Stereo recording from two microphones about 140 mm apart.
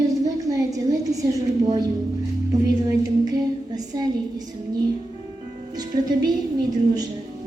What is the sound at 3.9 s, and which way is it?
Speech, 30° right (ahead or behind).